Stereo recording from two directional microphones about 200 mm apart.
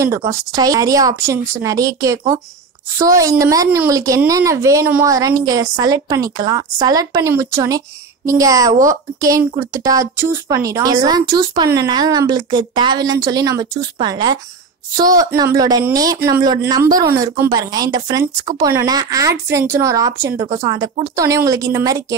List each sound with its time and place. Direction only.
0.0 s a woman's voice: 15° right (ahead or behind)